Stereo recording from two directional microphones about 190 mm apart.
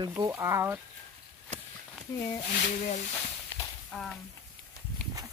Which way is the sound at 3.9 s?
5° left (ahead or behind).